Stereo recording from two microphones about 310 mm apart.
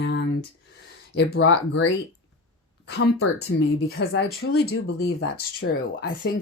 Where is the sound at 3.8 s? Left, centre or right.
Left.